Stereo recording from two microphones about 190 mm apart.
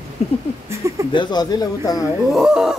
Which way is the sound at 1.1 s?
20° left (ahead or behind).